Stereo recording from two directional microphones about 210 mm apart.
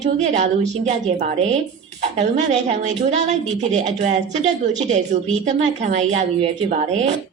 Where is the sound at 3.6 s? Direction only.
35° right (ahead or behind).